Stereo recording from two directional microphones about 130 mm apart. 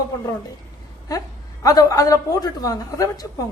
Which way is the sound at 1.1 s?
25° left (ahead or behind).